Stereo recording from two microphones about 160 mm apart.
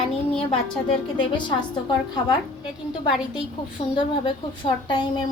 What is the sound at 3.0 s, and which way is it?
A woman's voice, 30° left (ahead or behind).